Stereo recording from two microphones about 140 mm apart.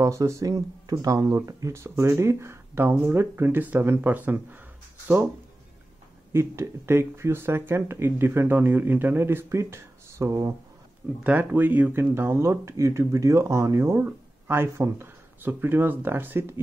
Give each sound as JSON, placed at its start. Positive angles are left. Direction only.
{"t": 0.0, "sound": "speech", "side_deg": -20}
{"t": 6.3, "sound": "speech", "side_deg": -20}